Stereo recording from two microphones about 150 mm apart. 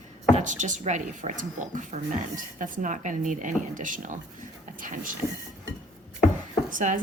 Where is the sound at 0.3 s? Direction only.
55° right (ahead or behind).